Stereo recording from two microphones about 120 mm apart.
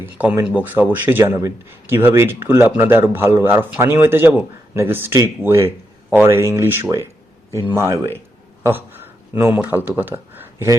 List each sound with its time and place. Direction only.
0.0 s speech: 15° right (ahead or behind)
8.6 s a sound: 20° right (ahead or behind)
9.6 s speech: 15° right (ahead or behind)